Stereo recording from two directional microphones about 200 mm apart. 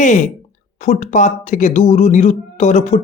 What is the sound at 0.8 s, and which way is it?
Speech, 35° left (ahead or behind).